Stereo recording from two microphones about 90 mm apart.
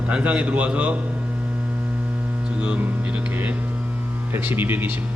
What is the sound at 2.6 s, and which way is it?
Speech, 15° right (ahead or behind).